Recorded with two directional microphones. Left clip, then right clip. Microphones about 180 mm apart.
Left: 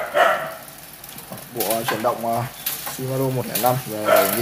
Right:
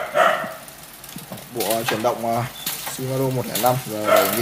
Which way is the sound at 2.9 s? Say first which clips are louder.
Even; 5° right (ahead or behind).